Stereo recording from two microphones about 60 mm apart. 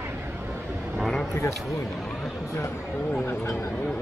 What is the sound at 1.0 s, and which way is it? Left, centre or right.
Vehicle, centre.